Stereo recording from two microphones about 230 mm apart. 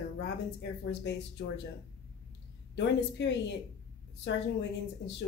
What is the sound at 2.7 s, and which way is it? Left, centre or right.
Speech, left.